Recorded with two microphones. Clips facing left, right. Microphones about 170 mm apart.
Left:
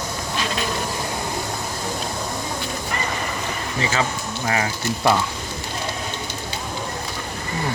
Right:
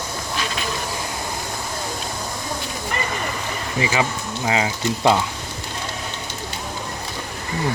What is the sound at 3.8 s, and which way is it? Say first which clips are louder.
Speech: right 2 dB; 15° right (ahead or behind).